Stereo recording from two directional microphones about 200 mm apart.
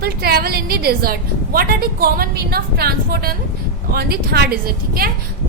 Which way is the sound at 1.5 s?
50° right (ahead or behind).